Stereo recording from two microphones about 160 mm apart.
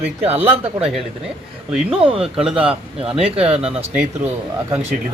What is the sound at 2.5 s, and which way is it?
A man's voice, 35° right (ahead or behind).